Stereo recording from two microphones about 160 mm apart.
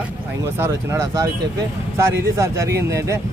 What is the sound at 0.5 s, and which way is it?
Speech, 15° right (ahead or behind).